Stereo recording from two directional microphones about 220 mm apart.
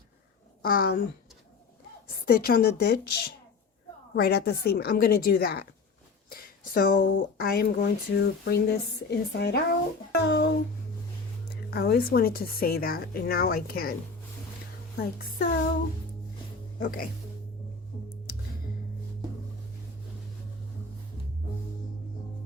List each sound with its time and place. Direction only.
0.6 s speech: 40° left (ahead or behind)
2.2 s speech: 45° left (ahead or behind)
4.1 s speech: 45° left (ahead or behind)
14.9 s speech: 45° left (ahead or behind)
16.8 s speech: 40° left (ahead or behind)